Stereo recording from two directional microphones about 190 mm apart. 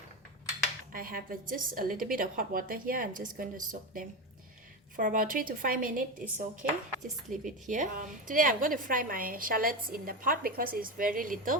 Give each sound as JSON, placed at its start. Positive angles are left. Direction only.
{"t": 0.9, "sound": "a woman's voice", "side_deg": -50}